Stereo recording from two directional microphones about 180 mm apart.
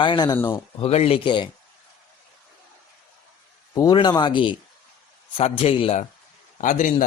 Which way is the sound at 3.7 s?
20° left (ahead or behind).